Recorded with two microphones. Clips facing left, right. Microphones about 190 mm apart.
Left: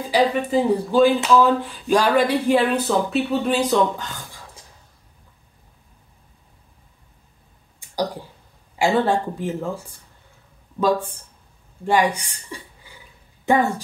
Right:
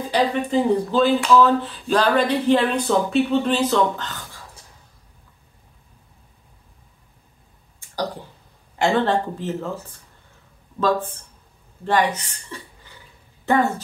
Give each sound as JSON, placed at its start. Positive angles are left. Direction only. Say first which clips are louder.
{"t": 0.1, "sound": "speech", "louder": "left 2 dB", "side_deg": 5}
{"t": 8.7, "sound": "a woman's voice", "louder": "even", "side_deg": 10}